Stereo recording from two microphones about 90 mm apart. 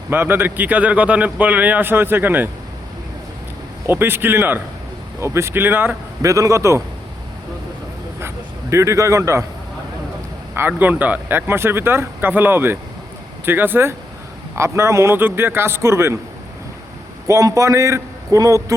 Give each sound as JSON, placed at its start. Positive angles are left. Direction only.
{"t": 0.1, "sound": "a man's voice", "side_deg": -25}
{"t": 3.8, "sound": "a man's voice", "side_deg": -25}
{"t": 6.2, "sound": "a man's voice", "side_deg": -40}
{"t": 8.7, "sound": "a man's voice", "side_deg": -35}
{"t": 10.5, "sound": "a man's voice", "side_deg": -20}
{"t": 17.2, "sound": "a man's voice", "side_deg": -35}